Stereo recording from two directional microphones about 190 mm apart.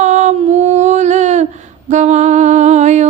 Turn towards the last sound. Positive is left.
turn(degrees=-35)  # may be behind; listen again after turning